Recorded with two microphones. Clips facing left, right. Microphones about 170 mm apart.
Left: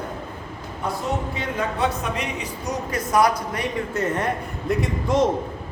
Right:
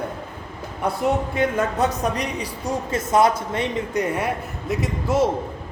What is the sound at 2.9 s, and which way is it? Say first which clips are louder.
A woman's voice: right 1 dB; 25° right (ahead or behind).